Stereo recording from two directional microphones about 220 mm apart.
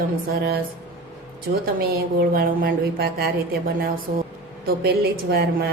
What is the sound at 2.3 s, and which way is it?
Speech, 40° right (ahead or behind).